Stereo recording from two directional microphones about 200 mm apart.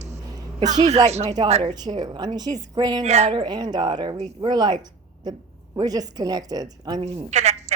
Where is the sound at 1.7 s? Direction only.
20° right (ahead or behind).